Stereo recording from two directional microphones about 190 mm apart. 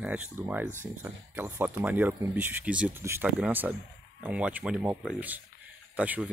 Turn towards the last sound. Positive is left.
turn(degrees=-5)  # may be behind; listen again after turning